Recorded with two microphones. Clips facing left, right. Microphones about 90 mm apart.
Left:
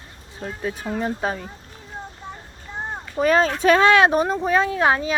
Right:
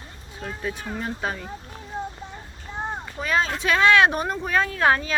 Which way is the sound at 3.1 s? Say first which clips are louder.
Left 7 dB; 40° left (ahead or behind).